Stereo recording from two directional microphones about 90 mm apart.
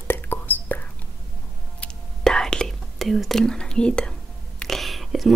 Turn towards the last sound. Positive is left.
turn(degrees=0)  # may be behind; listen again after turning